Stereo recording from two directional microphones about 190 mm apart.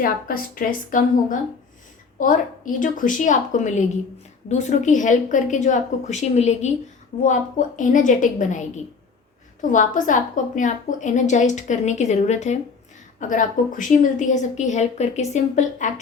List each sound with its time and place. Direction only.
0.0 s a woman's voice: 50° left (ahead or behind)